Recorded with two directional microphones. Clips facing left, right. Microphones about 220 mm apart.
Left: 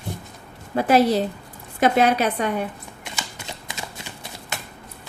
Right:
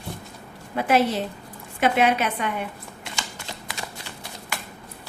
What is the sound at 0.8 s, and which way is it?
A woman's voice, 40° left (ahead or behind).